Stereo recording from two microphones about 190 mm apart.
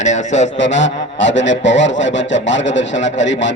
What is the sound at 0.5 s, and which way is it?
Honk, 75° left (ahead or behind).